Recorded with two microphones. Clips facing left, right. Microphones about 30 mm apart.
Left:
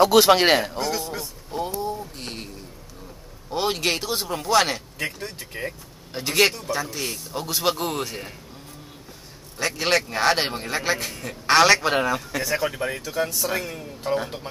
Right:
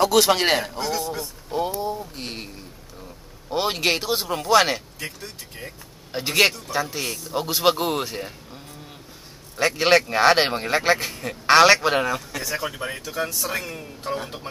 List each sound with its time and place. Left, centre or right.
0.0 s a man's voice: centre
1.8 s speech: centre
4.9 s speech: left
6.1 s speech: centre
9.6 s a man's voice: centre